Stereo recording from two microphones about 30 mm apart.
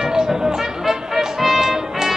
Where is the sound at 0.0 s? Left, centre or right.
Right.